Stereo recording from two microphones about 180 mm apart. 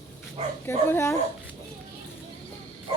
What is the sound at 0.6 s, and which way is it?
Speech, 15° left (ahead or behind).